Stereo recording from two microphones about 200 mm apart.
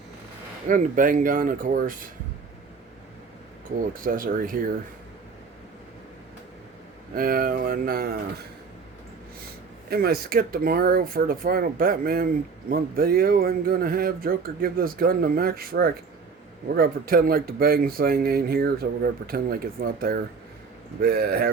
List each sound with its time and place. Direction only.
0.7 s speech: 40° right (ahead or behind)
3.8 s speech: 45° right (ahead or behind)
7.1 s speech: 45° right (ahead or behind)
9.9 s speech: 50° right (ahead or behind)